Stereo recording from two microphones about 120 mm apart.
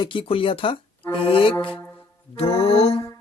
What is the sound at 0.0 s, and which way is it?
Speech, 45° left (ahead or behind).